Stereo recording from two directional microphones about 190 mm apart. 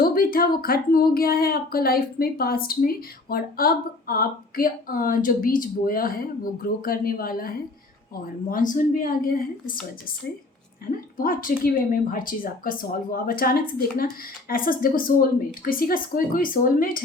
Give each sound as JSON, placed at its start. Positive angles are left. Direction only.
{"t": 0.0, "sound": "speech", "side_deg": 50}
{"t": 11.2, "sound": "speech", "side_deg": 45}